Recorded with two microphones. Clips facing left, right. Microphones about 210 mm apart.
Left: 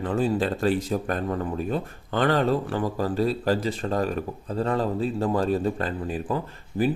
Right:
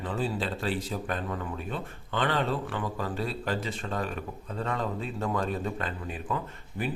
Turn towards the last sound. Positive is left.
turn(degrees=35)  # may be behind; listen again after turning